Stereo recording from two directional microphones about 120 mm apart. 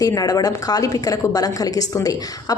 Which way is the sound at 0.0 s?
30° left (ahead or behind).